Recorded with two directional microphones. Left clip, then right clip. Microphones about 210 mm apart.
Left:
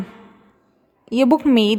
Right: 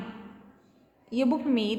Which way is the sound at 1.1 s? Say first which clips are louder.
Left 11 dB; 50° left (ahead or behind).